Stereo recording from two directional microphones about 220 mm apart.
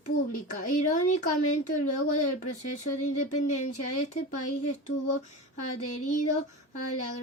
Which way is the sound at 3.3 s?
90° left.